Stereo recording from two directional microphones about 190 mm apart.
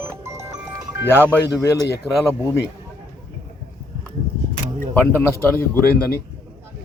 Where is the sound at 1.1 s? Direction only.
15° left (ahead or behind).